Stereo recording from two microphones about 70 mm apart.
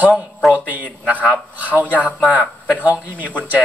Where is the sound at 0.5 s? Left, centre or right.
Right.